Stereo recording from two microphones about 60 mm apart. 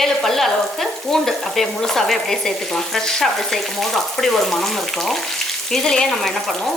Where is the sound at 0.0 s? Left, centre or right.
Centre.